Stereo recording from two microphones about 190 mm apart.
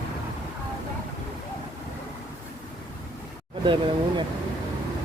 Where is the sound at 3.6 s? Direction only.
25° right (ahead or behind).